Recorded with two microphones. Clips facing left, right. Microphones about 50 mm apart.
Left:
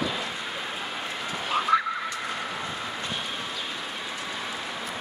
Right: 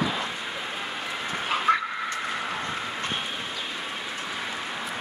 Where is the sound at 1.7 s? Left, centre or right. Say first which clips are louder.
Even; right.